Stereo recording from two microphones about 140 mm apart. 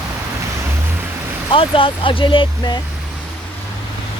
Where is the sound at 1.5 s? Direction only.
40° left (ahead or behind).